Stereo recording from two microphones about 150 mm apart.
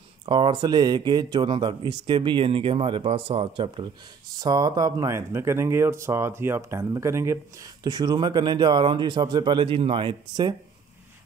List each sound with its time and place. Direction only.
0.2 s speech: 35° right (ahead or behind)